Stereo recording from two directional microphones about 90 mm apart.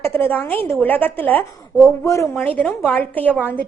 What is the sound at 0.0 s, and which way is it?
A woman's voice, 25° left (ahead or behind).